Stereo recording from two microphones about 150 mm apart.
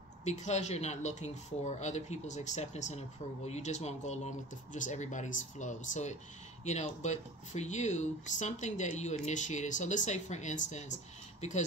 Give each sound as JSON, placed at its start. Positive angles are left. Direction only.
{"t": 0.2, "sound": "speech", "side_deg": 50}